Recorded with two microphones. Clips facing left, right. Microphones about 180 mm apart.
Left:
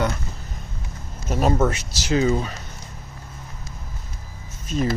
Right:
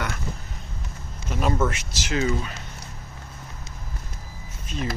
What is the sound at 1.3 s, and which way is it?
Speech, 40° left (ahead or behind).